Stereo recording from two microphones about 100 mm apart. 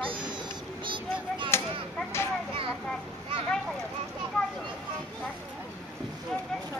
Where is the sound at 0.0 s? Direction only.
60° right (ahead or behind).